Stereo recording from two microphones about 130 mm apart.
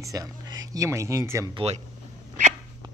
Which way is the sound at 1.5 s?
45° right (ahead or behind).